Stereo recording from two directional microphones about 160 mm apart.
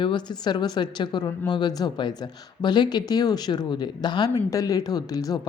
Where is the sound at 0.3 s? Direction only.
25° left (ahead or behind).